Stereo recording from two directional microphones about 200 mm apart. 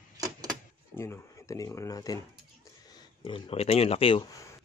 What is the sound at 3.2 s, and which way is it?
Speech, 25° left (ahead or behind).